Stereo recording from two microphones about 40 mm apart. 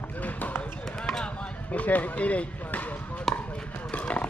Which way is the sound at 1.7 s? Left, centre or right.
Left.